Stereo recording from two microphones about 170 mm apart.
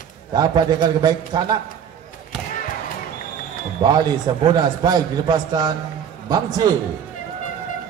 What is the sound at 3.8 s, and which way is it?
A man's voice, 25° right (ahead or behind).